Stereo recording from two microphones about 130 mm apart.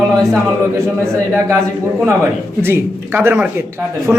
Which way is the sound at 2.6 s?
20° right (ahead or behind).